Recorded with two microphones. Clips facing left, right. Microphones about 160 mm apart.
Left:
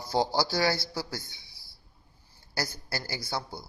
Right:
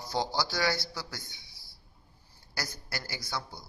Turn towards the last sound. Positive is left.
turn(degrees=30)  # may be behind; listen again after turning